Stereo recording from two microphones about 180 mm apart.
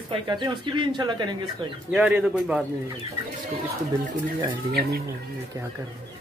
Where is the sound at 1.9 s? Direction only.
5° right (ahead or behind).